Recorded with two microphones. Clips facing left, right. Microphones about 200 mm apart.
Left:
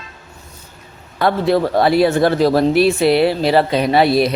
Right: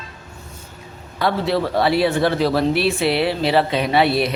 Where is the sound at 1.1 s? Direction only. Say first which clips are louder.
Left 4 dB; 50° left (ahead or behind).